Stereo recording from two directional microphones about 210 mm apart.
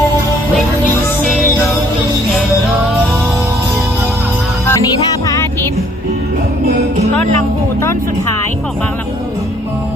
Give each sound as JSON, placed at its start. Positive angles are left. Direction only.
{"t": 4.6, "sound": "music", "side_deg": 15}